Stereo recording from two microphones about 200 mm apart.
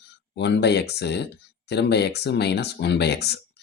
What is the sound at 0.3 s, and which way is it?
Speech, 60° left (ahead or behind).